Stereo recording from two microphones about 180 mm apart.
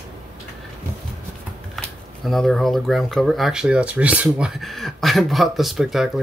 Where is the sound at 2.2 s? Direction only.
Centre (ahead or behind).